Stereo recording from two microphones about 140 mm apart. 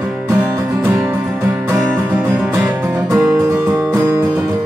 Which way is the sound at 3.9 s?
20° right (ahead or behind).